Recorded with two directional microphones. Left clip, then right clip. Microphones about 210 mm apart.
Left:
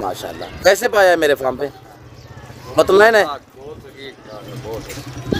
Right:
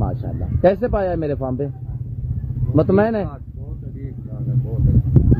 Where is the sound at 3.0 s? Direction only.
20° left (ahead or behind).